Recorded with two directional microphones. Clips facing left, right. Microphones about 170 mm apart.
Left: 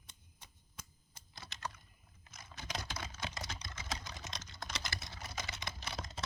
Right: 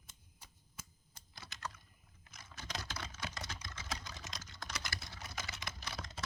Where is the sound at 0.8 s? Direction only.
5° right (ahead or behind).